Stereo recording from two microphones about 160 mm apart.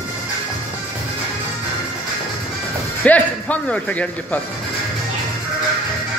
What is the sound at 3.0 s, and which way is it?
Speech, 10° left (ahead or behind).